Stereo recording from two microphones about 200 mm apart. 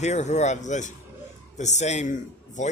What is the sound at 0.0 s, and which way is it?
Speech, 35° left (ahead or behind).